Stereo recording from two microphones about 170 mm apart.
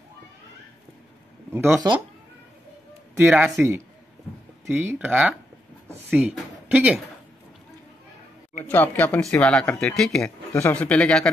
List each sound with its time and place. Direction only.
1.5 s speech: 10° right (ahead or behind)
3.2 s a woman's voice: 5° right (ahead or behind)
8.6 s speech: 10° left (ahead or behind)